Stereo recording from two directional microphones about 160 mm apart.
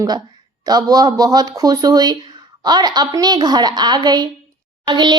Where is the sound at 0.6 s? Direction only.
25° right (ahead or behind).